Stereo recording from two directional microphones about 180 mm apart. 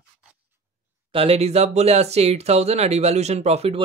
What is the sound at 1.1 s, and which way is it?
Speech, 30° right (ahead or behind).